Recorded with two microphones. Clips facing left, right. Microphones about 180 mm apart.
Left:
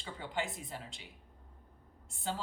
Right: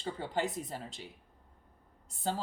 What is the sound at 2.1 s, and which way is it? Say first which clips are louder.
Speech: right 4 dB; 40° right (ahead or behind).